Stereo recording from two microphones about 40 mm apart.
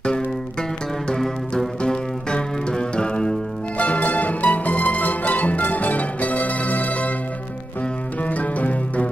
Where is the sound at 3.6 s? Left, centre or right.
Left.